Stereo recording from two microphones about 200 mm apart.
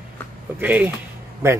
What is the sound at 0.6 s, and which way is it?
Speech, 10° right (ahead or behind).